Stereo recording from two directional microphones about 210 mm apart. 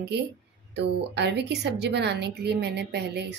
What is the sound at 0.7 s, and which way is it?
A woman's voice, 55° right (ahead or behind).